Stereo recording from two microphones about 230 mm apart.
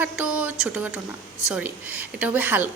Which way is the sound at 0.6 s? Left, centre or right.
Centre.